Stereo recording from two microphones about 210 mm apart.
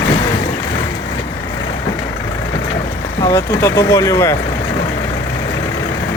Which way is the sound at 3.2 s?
15° left (ahead or behind).